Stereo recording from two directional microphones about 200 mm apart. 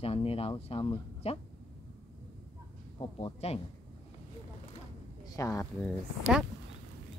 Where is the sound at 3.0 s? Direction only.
30° left (ahead or behind).